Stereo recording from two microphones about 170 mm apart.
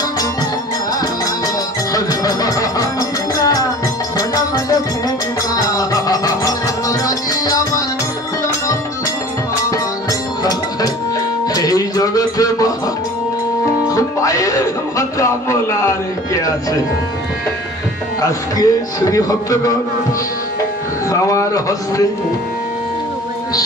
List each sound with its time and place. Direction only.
2.0 s music: 20° left (ahead or behind)
11.5 s music: 20° left (ahead or behind)
13.8 s music: 20° left (ahead or behind)
18.2 s a man's voice: 20° left (ahead or behind)
21.1 s speech: 20° left (ahead or behind)